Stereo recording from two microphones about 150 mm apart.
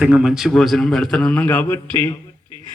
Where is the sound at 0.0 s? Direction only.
5° right (ahead or behind); by 2.1 s 15° left (ahead or behind).